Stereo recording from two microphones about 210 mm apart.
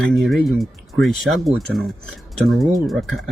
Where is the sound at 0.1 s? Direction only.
Centre (ahead or behind).